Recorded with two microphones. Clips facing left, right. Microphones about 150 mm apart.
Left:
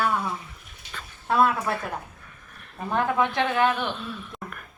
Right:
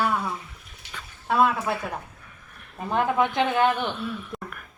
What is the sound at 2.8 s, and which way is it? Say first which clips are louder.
Speech: right 1 dB; 15° right (ahead or behind).